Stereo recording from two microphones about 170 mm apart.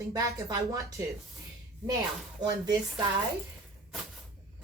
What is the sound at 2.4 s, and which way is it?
Speech, 25° right (ahead or behind).